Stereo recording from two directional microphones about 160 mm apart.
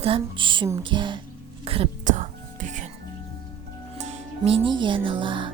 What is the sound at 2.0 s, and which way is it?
Whispering, 50° right (ahead or behind).